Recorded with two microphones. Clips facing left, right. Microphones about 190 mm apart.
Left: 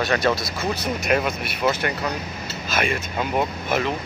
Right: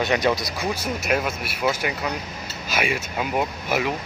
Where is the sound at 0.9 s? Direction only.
5° right (ahead or behind).